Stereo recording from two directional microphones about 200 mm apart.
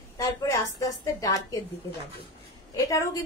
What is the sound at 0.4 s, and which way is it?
A woman's voice, 20° left (ahead or behind).